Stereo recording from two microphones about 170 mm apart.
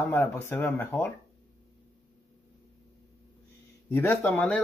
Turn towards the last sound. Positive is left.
turn(degrees=10)  # may be behind; listen again after turning